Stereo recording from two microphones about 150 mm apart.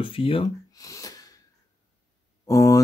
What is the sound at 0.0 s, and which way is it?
Speech, 35° left (ahead or behind).